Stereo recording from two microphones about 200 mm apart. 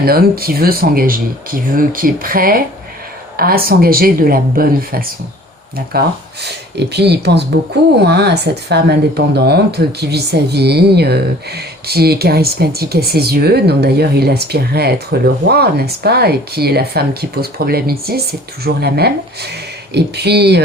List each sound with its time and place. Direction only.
0.0 s speech: 50° right (ahead or behind)